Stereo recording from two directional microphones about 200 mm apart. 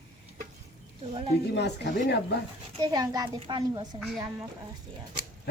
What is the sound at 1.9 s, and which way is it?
Speech, 55° left (ahead or behind).